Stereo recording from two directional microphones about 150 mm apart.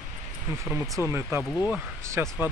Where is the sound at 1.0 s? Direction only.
20° right (ahead or behind).